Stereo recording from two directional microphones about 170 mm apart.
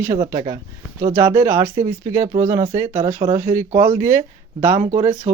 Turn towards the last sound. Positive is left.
turn(degrees=-10)  # may be behind; listen again after turning